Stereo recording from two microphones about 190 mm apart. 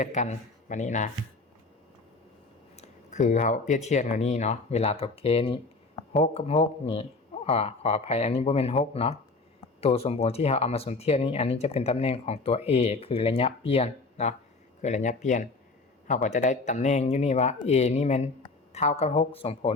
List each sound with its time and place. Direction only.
0.0 s speech: 40° left (ahead or behind)
2.7 s speech: 35° left (ahead or behind)